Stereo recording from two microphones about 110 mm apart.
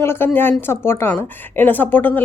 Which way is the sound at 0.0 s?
20° left (ahead or behind).